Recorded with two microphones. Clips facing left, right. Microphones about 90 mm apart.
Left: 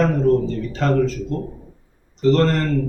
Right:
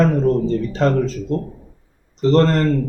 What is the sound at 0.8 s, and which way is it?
Speech, 30° right (ahead or behind).